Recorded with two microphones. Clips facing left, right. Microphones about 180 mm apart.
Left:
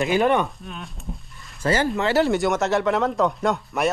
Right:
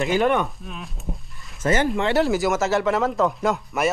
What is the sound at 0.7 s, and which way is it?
Speech, centre (ahead or behind).